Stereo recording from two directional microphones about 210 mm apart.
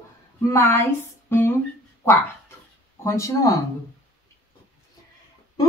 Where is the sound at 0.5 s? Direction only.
10° left (ahead or behind).